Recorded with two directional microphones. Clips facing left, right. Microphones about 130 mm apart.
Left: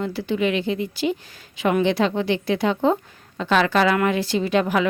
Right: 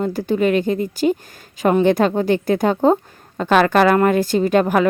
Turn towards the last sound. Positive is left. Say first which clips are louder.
# right 5 dB
turn(degrees=-45)  # may be behind; listen again after turning